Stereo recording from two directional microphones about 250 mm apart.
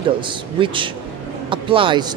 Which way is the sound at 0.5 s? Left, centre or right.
Centre.